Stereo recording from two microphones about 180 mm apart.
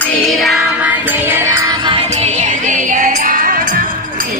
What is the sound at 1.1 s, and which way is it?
Music, 15° right (ahead or behind).